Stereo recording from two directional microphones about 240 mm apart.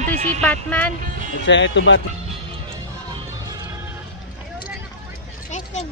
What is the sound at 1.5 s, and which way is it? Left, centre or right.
Speech, left.